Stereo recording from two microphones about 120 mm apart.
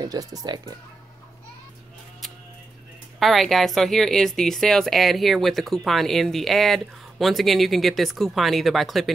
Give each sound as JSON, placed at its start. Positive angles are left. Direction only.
{"t": 0.0, "sound": "speech", "side_deg": -30}
{"t": 3.2, "sound": "a woman's voice", "side_deg": 0}